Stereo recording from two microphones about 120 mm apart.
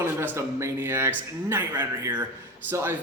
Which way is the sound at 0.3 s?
20° right (ahead or behind).